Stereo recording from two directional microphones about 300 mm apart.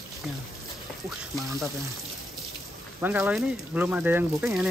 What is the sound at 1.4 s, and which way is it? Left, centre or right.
Speech, centre.